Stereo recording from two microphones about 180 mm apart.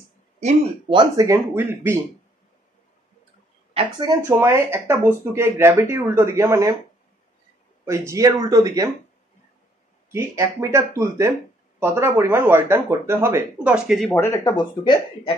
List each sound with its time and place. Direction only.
0.4 s speech: 40° right (ahead or behind)
0.9 s speech: 20° right (ahead or behind)
3.7 s speech: 20° right (ahead or behind)
7.8 s speech: 15° right (ahead or behind)
10.1 s speech: 15° right (ahead or behind)
14.1 s speech: 15° left (ahead or behind)